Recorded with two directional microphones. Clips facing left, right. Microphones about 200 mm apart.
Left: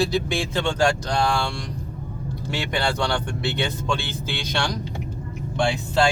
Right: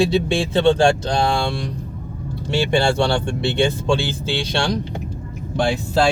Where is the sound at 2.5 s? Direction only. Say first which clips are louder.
Right 8 dB; 30° right (ahead or behind).